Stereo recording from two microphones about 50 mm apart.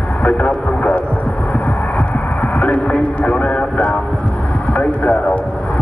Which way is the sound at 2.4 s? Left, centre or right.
Left.